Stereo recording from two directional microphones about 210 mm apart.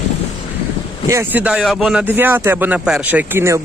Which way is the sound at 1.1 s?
10° right (ahead or behind).